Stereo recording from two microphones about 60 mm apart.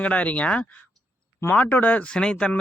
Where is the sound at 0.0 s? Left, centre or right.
Left.